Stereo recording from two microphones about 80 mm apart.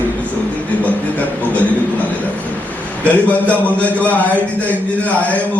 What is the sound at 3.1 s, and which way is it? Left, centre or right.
A man's voice, centre.